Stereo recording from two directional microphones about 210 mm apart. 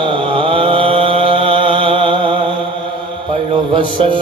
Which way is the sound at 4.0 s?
25° right (ahead or behind).